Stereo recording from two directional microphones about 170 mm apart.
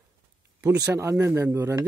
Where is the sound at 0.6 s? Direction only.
20° right (ahead or behind).